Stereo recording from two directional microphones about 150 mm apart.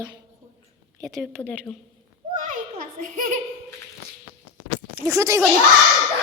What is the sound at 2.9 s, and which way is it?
Speech, 60° right (ahead or behind).